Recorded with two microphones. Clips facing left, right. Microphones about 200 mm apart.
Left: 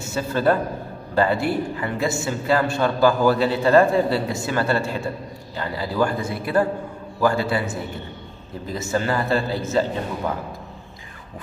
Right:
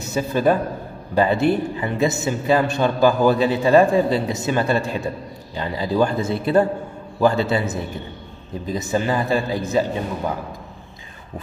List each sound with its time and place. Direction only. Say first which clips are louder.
0.0 s a man's voice: right 2 dB; 15° right (ahead or behind)